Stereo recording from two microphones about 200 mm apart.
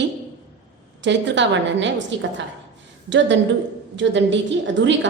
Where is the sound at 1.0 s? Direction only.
65° right (ahead or behind).